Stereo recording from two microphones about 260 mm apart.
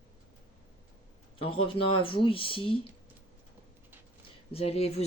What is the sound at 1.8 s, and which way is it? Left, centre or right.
Speech, centre.